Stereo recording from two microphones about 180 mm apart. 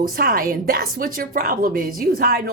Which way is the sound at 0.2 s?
55° right (ahead or behind).